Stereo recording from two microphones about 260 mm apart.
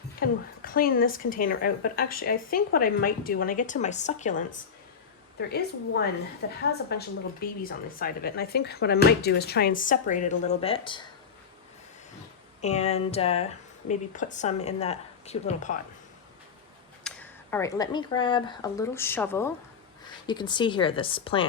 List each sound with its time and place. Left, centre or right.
0.2 s speech: left
5.4 s speech: left; by 11.0 s centre
12.6 s speech: left
17.0 s speech: centre